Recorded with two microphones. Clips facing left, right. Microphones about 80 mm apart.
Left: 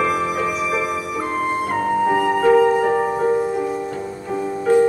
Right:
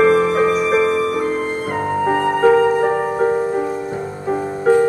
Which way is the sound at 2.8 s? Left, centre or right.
Right.